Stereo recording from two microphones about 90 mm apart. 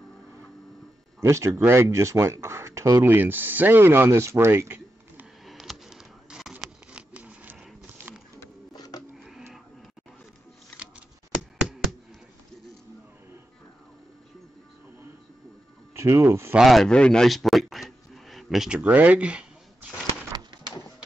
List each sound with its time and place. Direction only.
1.2 s speech: 30° right (ahead or behind)
3.0 s speech: 20° right (ahead or behind)
5.4 s a sound: centre (ahead or behind)
6.9 s patter: 15° right (ahead or behind)
8.1 s bird: 20° right (ahead or behind)
8.7 s printer: 45° left (ahead or behind)
9.2 s a sound: 5° right (ahead or behind)
15.9 s speech: 30° right (ahead or behind)
16.5 s speech: centre (ahead or behind)
18.8 s speech: 15° right (ahead or behind)
20.3 s a sound: 50° right (ahead or behind)